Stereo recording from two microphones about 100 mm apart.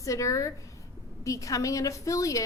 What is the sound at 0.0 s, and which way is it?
A woman's voice, 30° left (ahead or behind).